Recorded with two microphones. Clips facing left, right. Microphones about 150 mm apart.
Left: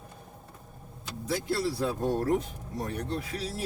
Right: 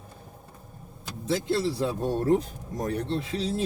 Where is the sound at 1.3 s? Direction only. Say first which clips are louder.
Right 4 dB; 25° right (ahead or behind).